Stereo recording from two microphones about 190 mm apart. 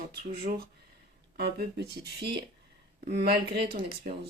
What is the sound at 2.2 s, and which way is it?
Speech, 60° right (ahead or behind).